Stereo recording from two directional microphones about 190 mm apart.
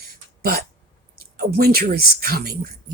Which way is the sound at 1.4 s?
55° right (ahead or behind).